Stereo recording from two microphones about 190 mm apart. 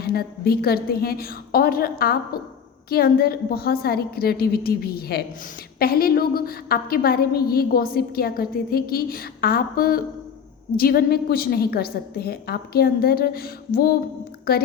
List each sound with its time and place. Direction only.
0.0 s a woman's voice: 55° left (ahead or behind)